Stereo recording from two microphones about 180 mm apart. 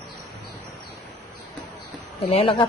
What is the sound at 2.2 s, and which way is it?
Speech, 35° left (ahead or behind).